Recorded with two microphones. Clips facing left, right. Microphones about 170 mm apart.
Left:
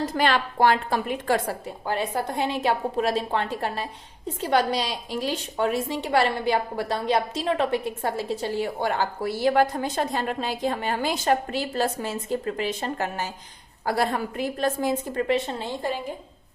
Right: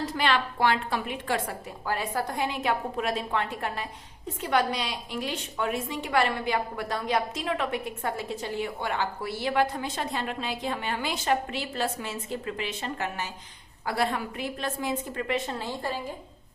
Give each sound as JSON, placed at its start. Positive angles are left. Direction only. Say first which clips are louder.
{"t": 0.0, "sound": "a woman's voice", "louder": "left 3 dB", "side_deg": 45}
{"t": 1.6, "sound": "a woman's voice", "louder": "left 4 dB", "side_deg": 25}
{"t": 15.4, "sound": "a woman's voice", "louder": "left 3 dB", "side_deg": 20}